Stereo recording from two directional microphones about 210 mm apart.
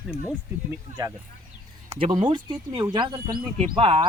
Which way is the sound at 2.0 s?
25° right (ahead or behind).